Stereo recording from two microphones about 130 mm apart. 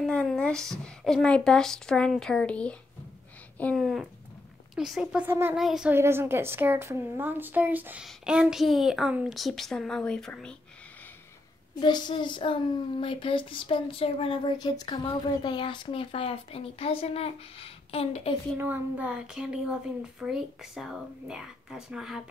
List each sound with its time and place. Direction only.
0.0 s speech: 5° left (ahead or behind)
3.7 s a woman's voice: centre (ahead or behind)
5.6 s speech: centre (ahead or behind)
5.9 s a woman's voice: 20° right (ahead or behind); by 10.5 s 5° left (ahead or behind)
11.8 s a child's voice: 35° left (ahead or behind)
14.6 s speech: 35° left (ahead or behind); by 18.3 s 50° left (ahead or behind)
18.6 s speech: 15° right (ahead or behind)